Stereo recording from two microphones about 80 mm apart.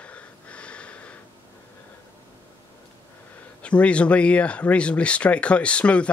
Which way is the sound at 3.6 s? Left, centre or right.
Centre.